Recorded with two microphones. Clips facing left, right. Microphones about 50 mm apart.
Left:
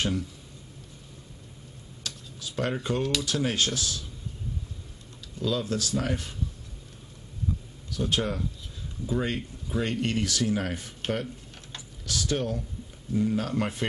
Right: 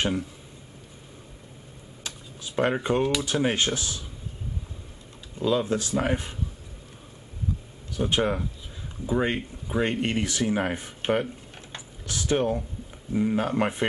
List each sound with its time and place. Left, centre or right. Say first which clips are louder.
2.0 s speech: even; right
5.4 s speech: right 4 dB; right
7.9 s speech: right 4 dB; right
11.7 s typing: left 1 dB; right
13.1 s speech: right 2 dB; right